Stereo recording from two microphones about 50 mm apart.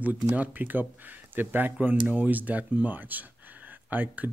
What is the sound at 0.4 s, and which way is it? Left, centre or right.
Speech, right.